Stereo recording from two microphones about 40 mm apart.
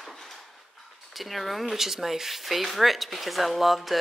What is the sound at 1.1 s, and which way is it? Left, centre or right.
Speech, centre.